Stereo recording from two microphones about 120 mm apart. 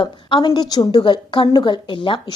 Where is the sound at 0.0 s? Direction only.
35° left (ahead or behind).